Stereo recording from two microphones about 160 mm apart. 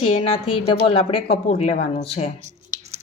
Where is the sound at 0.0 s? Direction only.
35° left (ahead or behind).